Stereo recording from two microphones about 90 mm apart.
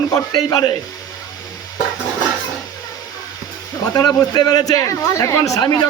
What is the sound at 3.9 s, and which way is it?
Speech, 45° left (ahead or behind).